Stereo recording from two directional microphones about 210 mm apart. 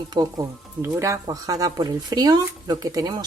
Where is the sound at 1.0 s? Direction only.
15° right (ahead or behind).